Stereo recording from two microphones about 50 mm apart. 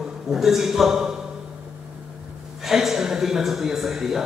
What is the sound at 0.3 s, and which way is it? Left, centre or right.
Speech, centre.